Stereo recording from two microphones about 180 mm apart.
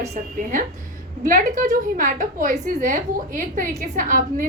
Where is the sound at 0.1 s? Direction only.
45° right (ahead or behind).